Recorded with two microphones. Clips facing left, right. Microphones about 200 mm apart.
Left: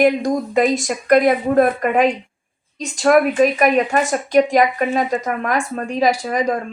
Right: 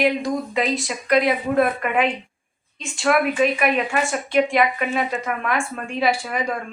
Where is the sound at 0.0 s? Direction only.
45° left (ahead or behind).